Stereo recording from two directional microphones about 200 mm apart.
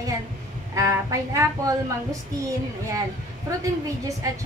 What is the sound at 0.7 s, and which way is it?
A woman's voice, 15° right (ahead or behind).